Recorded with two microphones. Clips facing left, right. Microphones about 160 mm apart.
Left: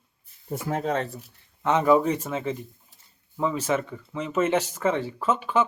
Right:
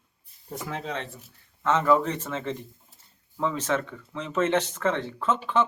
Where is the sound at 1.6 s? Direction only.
15° left (ahead or behind).